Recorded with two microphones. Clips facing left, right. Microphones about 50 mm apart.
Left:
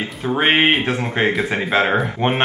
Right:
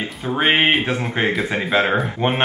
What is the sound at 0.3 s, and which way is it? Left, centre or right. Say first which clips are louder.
A man's voice: left 1 dB; centre.